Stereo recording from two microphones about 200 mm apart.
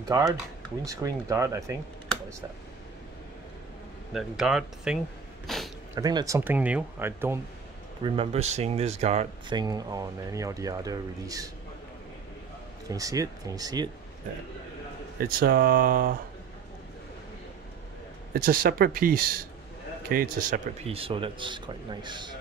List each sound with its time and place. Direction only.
0.8 s speech: 15° right (ahead or behind)
4.1 s speech: centre (ahead or behind)
5.5 s a sound: centre (ahead or behind)
5.9 s speech: 20° right (ahead or behind)
8.0 s speech: 30° right (ahead or behind)
9.6 s speech: 20° right (ahead or behind)
12.8 s speech: 15° right (ahead or behind)
15.1 s speech: 45° right (ahead or behind)
18.3 s speech: 45° right (ahead or behind); by 22.3 s 20° right (ahead or behind)